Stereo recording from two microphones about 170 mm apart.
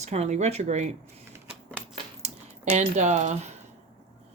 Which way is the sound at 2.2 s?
40° right (ahead or behind).